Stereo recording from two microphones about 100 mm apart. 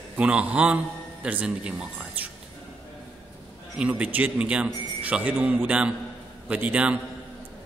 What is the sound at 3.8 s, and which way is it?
A man's voice, 15° right (ahead or behind).